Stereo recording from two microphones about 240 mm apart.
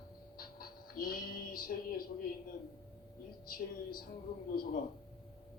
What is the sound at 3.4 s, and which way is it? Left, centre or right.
Speech, left.